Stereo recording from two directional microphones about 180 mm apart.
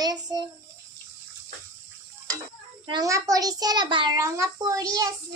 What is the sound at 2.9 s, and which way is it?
A child's voice, 20° right (ahead or behind).